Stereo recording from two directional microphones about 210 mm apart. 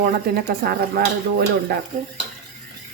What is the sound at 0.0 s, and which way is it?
Speech, 50° right (ahead or behind).